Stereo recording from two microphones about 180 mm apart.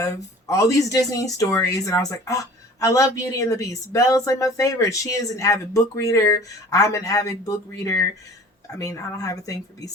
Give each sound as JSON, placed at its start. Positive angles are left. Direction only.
{"t": 0.0, "sound": "speech", "side_deg": 20}